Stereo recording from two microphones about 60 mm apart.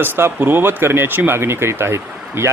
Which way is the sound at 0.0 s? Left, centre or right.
Right.